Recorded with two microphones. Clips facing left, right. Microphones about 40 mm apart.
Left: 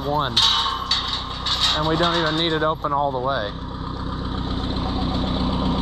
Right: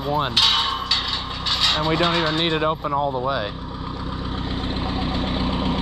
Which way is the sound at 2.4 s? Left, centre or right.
Right.